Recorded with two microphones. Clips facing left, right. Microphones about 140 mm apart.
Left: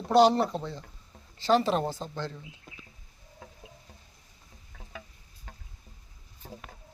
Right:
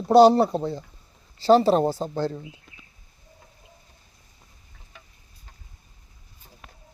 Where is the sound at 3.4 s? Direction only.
90° left.